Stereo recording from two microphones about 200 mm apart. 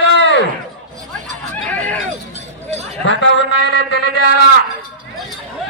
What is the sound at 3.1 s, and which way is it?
Speech, 65° left (ahead or behind).